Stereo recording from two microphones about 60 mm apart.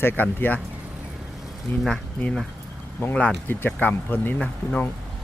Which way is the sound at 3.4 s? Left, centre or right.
Left.